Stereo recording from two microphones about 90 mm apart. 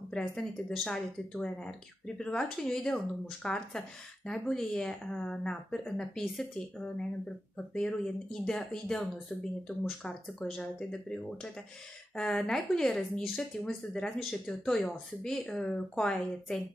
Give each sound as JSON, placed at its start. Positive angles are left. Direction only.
{"t": 0.3, "sound": "speech", "side_deg": 10}